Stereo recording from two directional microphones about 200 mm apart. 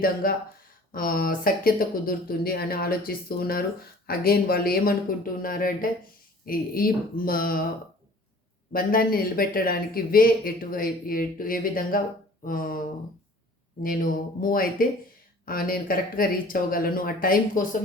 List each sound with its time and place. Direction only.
0.0 s speech: 45° left (ahead or behind)
8.7 s speech: 45° left (ahead or behind)